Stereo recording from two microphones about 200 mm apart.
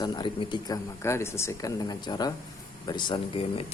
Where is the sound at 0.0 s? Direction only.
20° left (ahead or behind).